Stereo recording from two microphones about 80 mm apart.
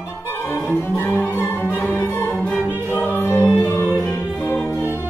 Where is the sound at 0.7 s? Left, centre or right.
Left.